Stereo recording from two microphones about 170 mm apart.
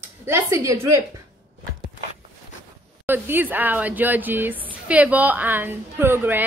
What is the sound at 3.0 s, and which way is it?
Speech, 10° right (ahead or behind).